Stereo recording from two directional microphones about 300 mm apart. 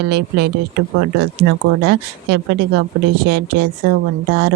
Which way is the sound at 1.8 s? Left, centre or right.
Right.